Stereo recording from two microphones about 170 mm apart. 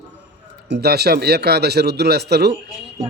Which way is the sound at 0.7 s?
70° right (ahead or behind).